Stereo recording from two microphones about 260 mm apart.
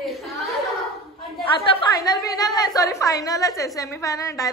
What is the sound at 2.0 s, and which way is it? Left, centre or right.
A woman's voice, centre.